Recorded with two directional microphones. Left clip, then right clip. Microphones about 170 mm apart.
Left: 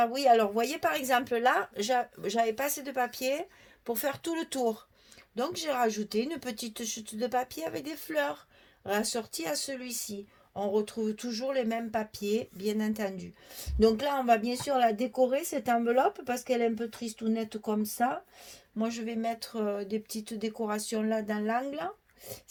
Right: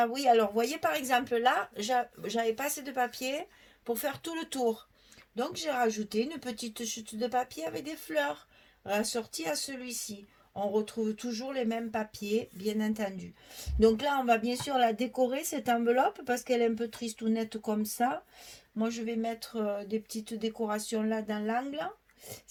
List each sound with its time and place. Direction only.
0.0 s speech: 45° left (ahead or behind)
18.8 s speech: 45° left (ahead or behind)